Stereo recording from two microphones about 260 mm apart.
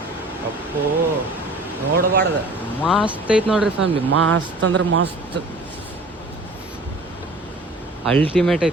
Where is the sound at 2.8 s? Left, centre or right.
Centre.